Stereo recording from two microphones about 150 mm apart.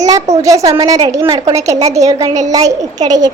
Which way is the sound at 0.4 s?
20° right (ahead or behind).